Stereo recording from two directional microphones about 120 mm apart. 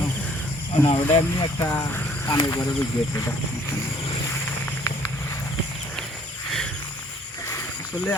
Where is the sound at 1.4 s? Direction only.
30° left (ahead or behind).